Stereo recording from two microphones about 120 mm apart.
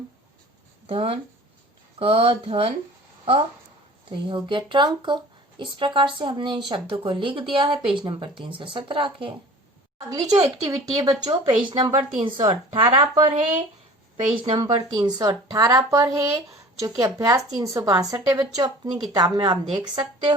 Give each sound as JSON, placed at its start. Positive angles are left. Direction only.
{"t": 0.9, "sound": "a woman's voice", "side_deg": -50}
{"t": 4.1, "sound": "a woman's voice", "side_deg": -40}
{"t": 10.1, "sound": "a woman's voice", "side_deg": -30}
{"t": 12.7, "sound": "a woman's voice", "side_deg": -55}
{"t": 14.3, "sound": "a woman's voice", "side_deg": -45}
{"t": 14.8, "sound": "speech", "side_deg": -35}